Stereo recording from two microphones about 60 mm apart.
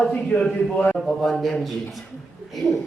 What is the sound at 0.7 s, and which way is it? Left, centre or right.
Speech, left.